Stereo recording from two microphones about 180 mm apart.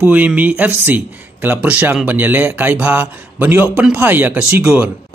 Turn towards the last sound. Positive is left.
turn(degrees=-5)  # may be behind; listen again after turning